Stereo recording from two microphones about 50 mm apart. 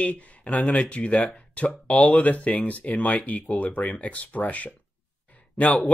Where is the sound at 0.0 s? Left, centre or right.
Left.